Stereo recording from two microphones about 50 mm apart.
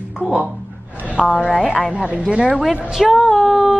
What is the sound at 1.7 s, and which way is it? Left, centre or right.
Speech, centre.